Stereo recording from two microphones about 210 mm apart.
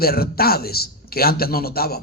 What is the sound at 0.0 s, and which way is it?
Speech, 45° left (ahead or behind).